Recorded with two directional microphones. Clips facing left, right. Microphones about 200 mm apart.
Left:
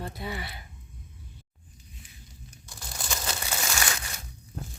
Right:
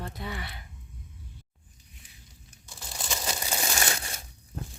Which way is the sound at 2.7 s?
5° right (ahead or behind).